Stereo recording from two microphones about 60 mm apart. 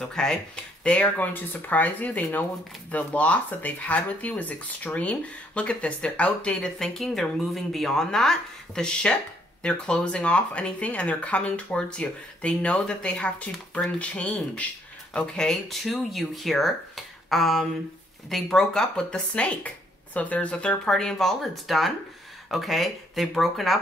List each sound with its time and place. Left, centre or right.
0.0 s speech: centre
0.8 s speech: left
15.5 s speech: centre
20.9 s speech: centre